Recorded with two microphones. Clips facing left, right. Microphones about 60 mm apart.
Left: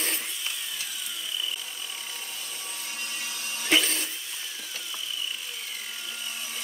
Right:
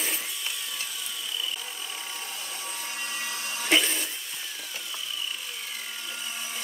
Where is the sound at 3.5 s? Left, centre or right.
Centre.